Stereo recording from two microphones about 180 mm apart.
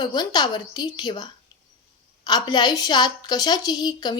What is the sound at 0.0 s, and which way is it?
Speech, 25° left (ahead or behind).